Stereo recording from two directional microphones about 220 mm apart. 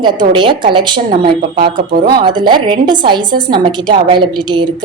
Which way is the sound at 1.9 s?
40° right (ahead or behind).